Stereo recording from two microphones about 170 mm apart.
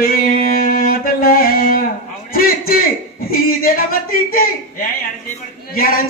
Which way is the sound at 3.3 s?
60° left (ahead or behind).